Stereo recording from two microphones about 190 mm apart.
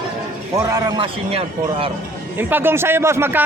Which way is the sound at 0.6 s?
20° right (ahead or behind).